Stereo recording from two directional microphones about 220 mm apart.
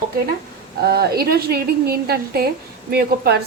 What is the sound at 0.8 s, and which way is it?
A woman's voice, 45° right (ahead or behind).